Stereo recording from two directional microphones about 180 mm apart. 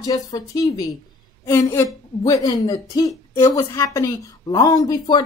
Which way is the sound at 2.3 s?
20° left (ahead or behind).